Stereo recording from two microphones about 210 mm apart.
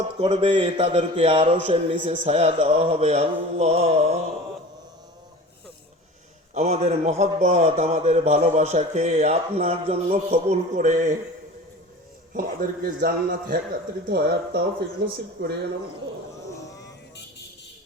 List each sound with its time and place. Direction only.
0.2 s a man's voice: 25° right (ahead or behind)
6.5 s speech: 35° right (ahead or behind)
12.3 s a man's voice: 45° right (ahead or behind)